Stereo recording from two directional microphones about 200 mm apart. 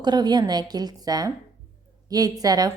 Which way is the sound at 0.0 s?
20° right (ahead or behind).